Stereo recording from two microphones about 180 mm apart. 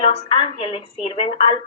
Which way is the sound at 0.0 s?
30° left (ahead or behind).